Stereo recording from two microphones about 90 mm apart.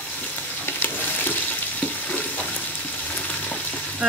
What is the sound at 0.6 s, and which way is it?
Frying, 20° left (ahead or behind).